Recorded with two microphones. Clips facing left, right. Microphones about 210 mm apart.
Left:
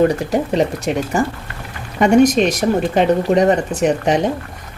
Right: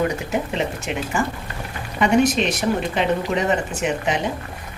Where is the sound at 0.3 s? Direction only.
40° left (ahead or behind).